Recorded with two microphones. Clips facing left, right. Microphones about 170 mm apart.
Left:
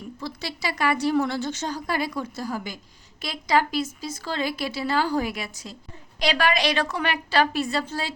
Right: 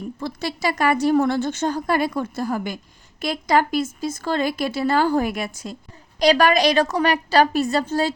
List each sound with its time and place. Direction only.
0.2 s a woman's voice: 50° right (ahead or behind)